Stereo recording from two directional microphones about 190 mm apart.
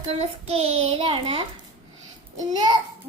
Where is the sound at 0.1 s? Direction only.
30° right (ahead or behind).